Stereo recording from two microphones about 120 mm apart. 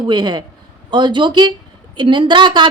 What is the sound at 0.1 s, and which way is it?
A woman's voice, 35° right (ahead or behind).